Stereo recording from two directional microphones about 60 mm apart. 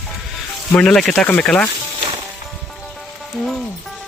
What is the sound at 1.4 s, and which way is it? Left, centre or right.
Speech, centre.